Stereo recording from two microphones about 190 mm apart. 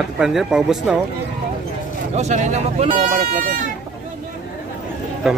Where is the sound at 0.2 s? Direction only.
Centre (ahead or behind).